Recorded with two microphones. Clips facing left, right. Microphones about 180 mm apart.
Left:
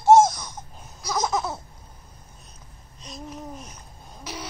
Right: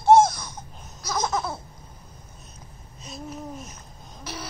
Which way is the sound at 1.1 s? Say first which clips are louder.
Left 1 dB; centre (ahead or behind).